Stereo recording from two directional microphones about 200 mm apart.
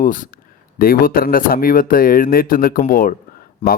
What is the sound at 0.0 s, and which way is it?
Speech, 40° left (ahead or behind).